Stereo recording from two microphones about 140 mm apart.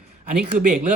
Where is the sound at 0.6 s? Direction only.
70° right (ahead or behind).